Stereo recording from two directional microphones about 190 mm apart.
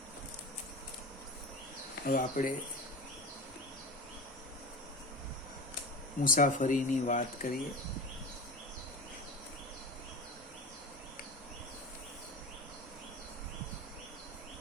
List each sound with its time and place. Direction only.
2.0 s speech: 50° left (ahead or behind)
6.2 s speech: 45° left (ahead or behind)